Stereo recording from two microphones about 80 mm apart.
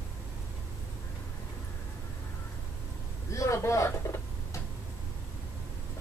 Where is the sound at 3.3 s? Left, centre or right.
Left.